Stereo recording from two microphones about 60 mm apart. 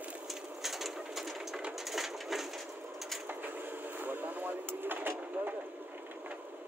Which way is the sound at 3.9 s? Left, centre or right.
Right.